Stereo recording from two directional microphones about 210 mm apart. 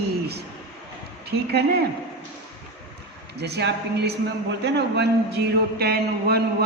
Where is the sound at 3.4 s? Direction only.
50° right (ahead or behind).